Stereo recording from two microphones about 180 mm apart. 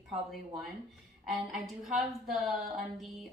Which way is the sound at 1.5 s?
Centre (ahead or behind).